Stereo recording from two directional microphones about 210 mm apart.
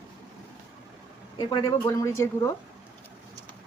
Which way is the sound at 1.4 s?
20° left (ahead or behind).